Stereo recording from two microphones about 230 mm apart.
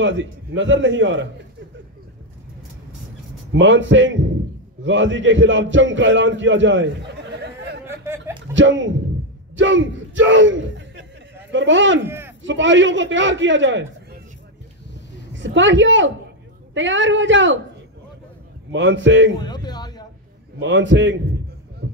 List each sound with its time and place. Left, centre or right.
0.0 s a man's voice: right
3.5 s a man's voice: right
7.8 s snicker: centre
8.5 s a man's voice: right
12.1 s a sound: centre
12.4 s a man's voice: right
15.3 s a woman's voice: right
18.7 s a man's voice: right
19.4 s a sound: centre
20.6 s a man's voice: right
21.8 s music: right